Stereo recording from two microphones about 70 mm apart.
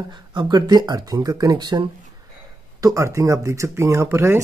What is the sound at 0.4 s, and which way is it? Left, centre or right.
Speech, right.